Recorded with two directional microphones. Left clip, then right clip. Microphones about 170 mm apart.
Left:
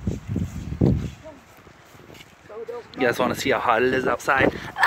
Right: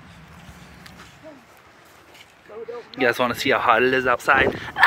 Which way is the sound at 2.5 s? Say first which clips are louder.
Even; 40° right (ahead or behind).